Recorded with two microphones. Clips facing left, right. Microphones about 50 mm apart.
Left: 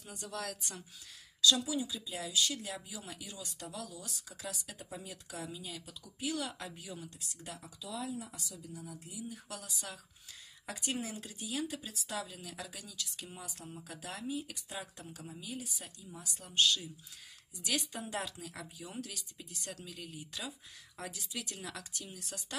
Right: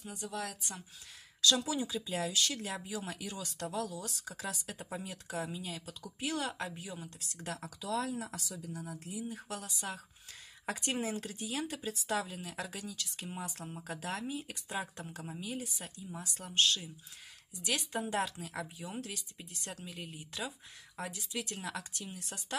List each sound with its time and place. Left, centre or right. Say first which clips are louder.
0.0 s speech: right 2 dB; centre
1.7 s speech: right 2 dB; right
3.6 s speech: right 8 dB; right
7.2 s speech: right 5 dB; right
7.5 s speech: right 8 dB; right
9.1 s speech: right 5 dB; right
17.6 s speech: right 2 dB; right
18.1 s speech: right 4 dB; right